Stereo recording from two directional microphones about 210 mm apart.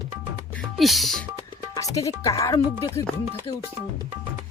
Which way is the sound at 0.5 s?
Centre (ahead or behind).